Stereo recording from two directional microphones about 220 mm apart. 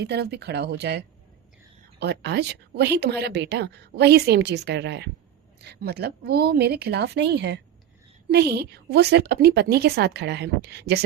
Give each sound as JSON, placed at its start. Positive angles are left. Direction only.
{"t": 0.0, "sound": "speech", "side_deg": -50}